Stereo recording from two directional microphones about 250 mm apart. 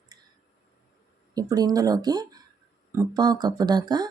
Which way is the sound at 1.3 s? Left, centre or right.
Centre.